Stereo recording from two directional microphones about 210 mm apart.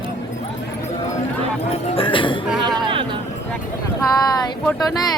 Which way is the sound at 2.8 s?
20° right (ahead or behind).